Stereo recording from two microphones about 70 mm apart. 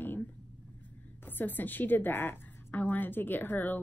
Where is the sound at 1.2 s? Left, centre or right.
Left.